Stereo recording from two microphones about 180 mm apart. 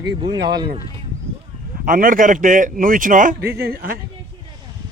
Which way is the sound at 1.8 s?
50° right (ahead or behind).